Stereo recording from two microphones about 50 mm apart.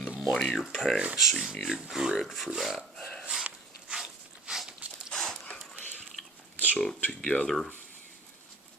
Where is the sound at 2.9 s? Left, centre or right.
Centre.